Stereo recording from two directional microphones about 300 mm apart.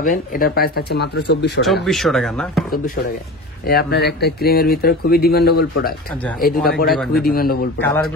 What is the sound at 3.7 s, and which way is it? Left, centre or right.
Speech, left.